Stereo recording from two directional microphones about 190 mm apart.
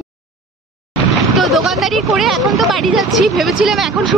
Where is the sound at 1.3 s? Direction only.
Centre (ahead or behind).